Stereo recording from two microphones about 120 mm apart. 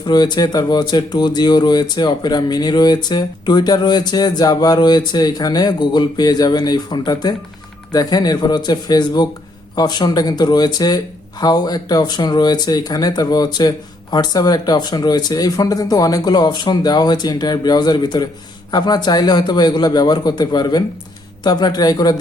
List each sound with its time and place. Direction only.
0.0 s speech: 35° left (ahead or behind)